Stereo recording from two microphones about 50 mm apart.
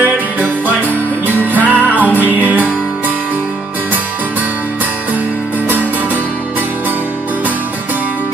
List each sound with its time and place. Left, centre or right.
0.0 s music: right